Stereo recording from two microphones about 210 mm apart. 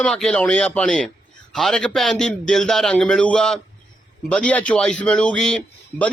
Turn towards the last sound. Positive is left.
turn(degrees=5)  # may be behind; listen again after turning